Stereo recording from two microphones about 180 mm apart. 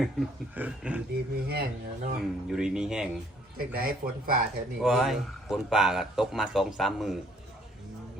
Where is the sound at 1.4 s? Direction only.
60° right (ahead or behind).